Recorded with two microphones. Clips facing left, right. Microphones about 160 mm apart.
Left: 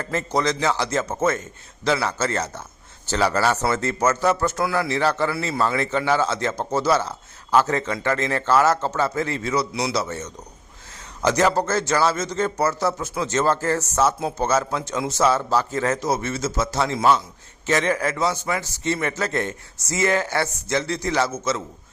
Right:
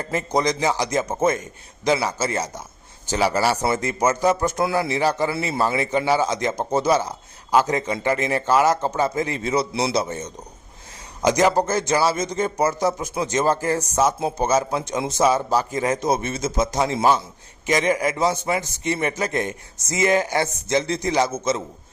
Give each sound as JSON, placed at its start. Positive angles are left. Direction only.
{"t": 0.0, "sound": "a man's voice", "side_deg": -15}